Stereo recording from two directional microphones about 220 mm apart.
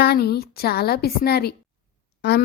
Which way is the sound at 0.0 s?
45° left (ahead or behind).